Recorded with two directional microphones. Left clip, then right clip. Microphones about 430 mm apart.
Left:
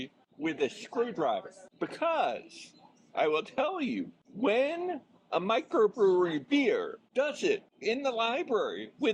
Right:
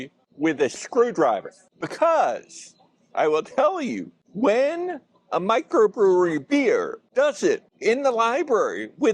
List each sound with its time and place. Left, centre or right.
0.4 s speech: right
7.1 s speech: right
7.8 s speech: right